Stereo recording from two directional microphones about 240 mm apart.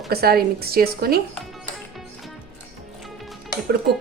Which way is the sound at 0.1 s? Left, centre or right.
Right.